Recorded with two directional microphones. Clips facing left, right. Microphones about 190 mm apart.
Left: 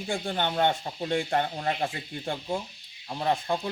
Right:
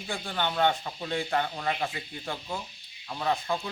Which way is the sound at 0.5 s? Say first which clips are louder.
Right 1 dB; 30° left (ahead or behind).